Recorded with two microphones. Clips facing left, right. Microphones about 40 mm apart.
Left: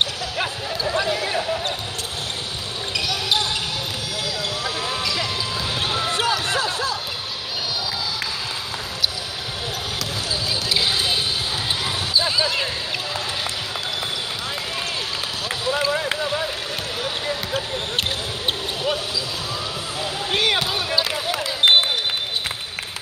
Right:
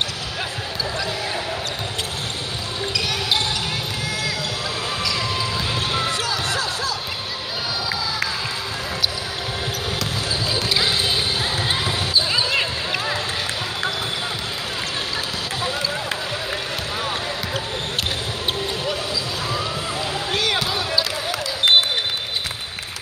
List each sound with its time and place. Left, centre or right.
6.4 s basketball bounce: left
11.6 s basketball bounce: right
12.3 s basketball bounce: centre
15.7 s run: left
20.2 s basketball bounce: centre